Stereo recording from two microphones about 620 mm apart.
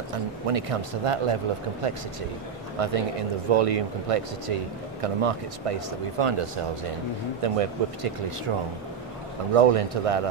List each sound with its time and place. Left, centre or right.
0.5 s speech: right
2.8 s speech: right
9.6 s speech: right